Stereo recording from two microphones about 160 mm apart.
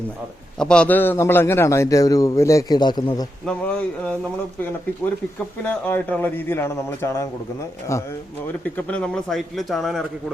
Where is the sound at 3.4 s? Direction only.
10° left (ahead or behind).